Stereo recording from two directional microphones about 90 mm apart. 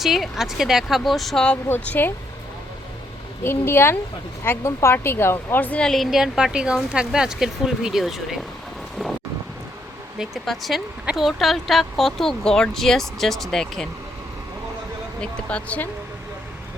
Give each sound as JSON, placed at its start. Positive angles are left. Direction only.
{"t": 0.0, "sound": "speech", "side_deg": 0}
{"t": 1.8, "sound": "speech", "side_deg": 20}
{"t": 3.4, "sound": "speech", "side_deg": 25}
{"t": 5.8, "sound": "speech", "side_deg": 0}
{"t": 10.2, "sound": "speech", "side_deg": 0}
{"t": 15.2, "sound": "speech", "side_deg": 15}